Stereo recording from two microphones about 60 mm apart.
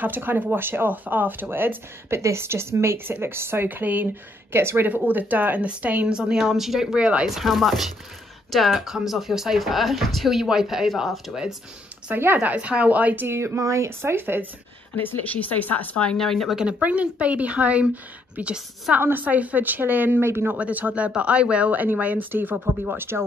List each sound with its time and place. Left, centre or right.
0.0 s speech: right
4.6 s a woman's voice: right
4.8 s a woman's voice: right; by 7.0 s centre
7.0 s speech: centre
7.2 s a woman's voice: centre
12.2 s speech: right
13.3 s a woman's voice: right
15.0 s speech: left
16.6 s a woman's voice: right
18.9 s speech: right
20.5 s speech: right